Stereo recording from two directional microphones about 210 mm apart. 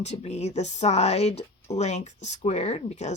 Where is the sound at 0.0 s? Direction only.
30° left (ahead or behind).